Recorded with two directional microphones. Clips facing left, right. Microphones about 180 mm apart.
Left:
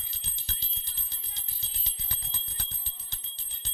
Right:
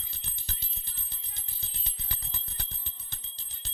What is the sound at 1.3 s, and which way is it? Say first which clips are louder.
Music: right 3 dB; 55° right (ahead or behind).